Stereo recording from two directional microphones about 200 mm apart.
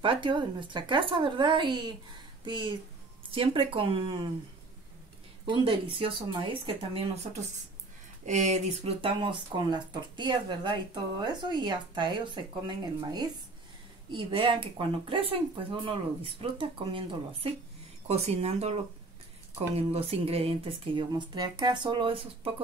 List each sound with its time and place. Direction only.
0.0 s speech: 25° right (ahead or behind)
5.4 s speech: 25° right (ahead or behind)